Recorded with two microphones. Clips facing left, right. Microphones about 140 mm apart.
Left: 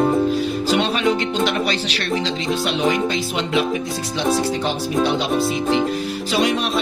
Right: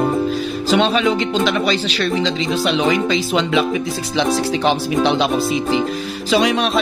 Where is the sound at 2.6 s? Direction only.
85° right.